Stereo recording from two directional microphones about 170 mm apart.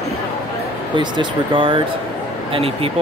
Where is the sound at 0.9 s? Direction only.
30° right (ahead or behind).